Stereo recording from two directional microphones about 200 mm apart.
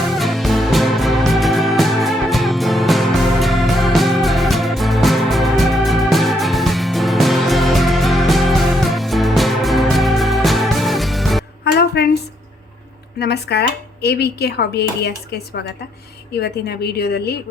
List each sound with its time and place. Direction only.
0.0 s music: centre (ahead or behind)
11.6 s music: 55° left (ahead or behind)
13.1 s speech: 55° left (ahead or behind)